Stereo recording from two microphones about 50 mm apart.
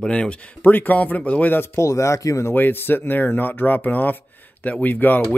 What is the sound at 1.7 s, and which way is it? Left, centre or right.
Speech, left.